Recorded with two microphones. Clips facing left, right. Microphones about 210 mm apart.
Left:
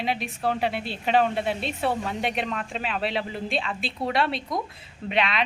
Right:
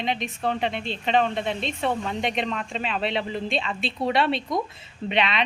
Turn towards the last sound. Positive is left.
turn(degrees=0)  # may be behind; listen again after turning